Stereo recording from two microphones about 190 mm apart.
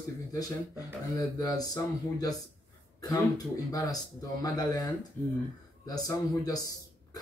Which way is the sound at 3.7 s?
20° left (ahead or behind).